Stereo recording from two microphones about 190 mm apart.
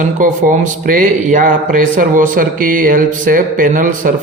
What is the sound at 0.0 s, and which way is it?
Speech, 40° right (ahead or behind).